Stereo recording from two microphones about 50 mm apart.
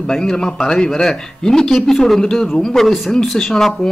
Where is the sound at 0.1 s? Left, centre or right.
Centre.